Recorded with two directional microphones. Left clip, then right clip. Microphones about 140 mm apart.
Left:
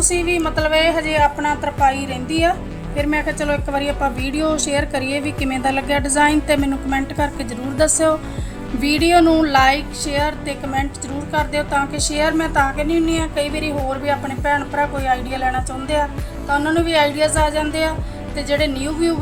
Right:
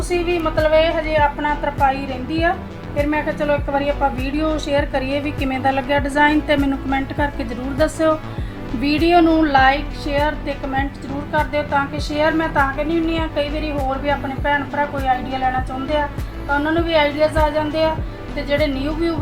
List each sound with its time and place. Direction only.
0.1 s a woman's voice: 35° left (ahead or behind)